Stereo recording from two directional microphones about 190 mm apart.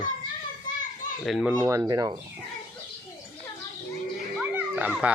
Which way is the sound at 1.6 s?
15° right (ahead or behind).